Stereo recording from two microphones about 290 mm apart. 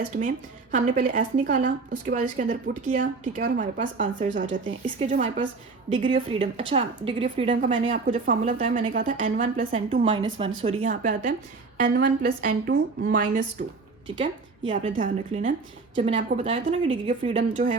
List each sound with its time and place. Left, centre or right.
0.2 s a woman's voice: right
14.7 s a woman's voice: right